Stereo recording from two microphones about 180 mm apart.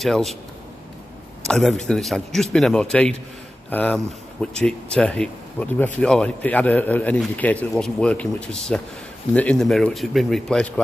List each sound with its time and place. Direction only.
0.0 s speech: centre (ahead or behind)
1.5 s a man's voice: centre (ahead or behind)